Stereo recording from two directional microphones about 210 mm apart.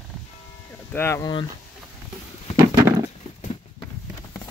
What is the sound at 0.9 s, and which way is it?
Speech, 10° left (ahead or behind).